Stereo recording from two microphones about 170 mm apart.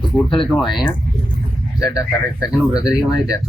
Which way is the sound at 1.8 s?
20° left (ahead or behind).